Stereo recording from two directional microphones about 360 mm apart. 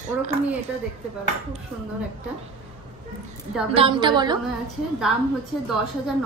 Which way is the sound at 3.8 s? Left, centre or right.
Centre.